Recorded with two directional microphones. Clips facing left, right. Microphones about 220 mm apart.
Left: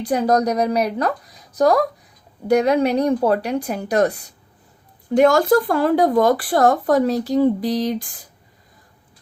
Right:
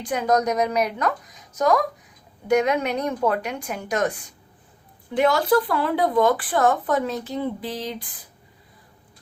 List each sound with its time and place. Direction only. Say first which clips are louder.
0.0 s speech: left 4 dB; 35° left (ahead or behind)